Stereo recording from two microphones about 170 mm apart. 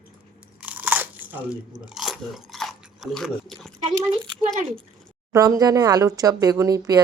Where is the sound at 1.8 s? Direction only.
Centre (ahead or behind).